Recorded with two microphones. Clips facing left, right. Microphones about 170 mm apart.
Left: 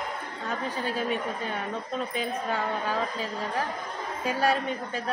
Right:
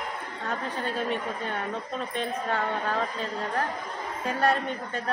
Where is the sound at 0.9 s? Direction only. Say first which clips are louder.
Even; 5° left (ahead or behind).